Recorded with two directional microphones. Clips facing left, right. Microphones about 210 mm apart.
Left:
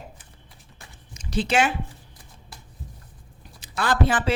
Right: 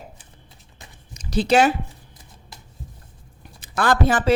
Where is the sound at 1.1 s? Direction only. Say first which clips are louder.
Right 5 dB; 40° right (ahead or behind).